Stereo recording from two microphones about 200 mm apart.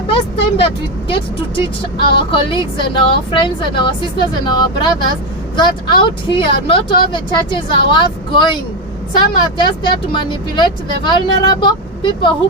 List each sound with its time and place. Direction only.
0.5 s speech: 25° left (ahead or behind)